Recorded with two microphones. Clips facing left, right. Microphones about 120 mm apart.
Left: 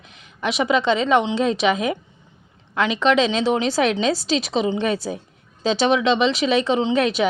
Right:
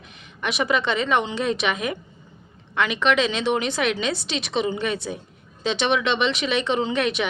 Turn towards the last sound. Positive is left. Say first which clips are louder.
# left 4 dB
turn(degrees=35)  # may be behind; listen again after turning